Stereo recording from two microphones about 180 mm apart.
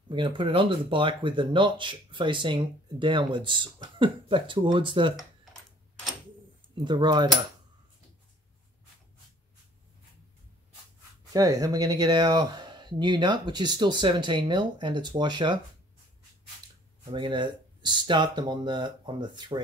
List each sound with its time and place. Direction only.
0.1 s speech: 25° right (ahead or behind)
6.7 s speech: 25° right (ahead or behind)
11.3 s speech: 20° right (ahead or behind)
17.1 s speech: 25° right (ahead or behind)